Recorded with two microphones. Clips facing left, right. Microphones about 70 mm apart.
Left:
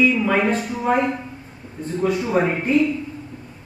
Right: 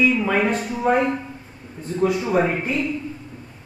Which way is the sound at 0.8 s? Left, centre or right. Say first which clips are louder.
Right 2 dB; centre.